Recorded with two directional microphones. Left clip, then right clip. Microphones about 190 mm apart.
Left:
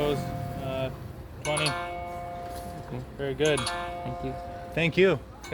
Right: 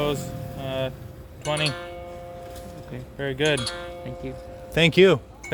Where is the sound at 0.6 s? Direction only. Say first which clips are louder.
Right 4 dB; 50° right (ahead or behind).